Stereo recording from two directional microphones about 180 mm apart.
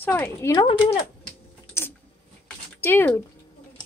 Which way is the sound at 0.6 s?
30° left (ahead or behind).